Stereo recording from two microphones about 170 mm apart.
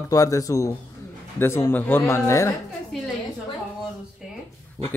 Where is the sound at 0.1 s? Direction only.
20° left (ahead or behind).